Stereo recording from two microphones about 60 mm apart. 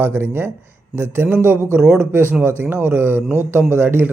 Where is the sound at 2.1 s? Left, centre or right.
Right.